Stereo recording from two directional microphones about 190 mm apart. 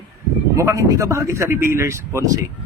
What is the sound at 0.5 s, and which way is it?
A man's voice, 15° right (ahead or behind).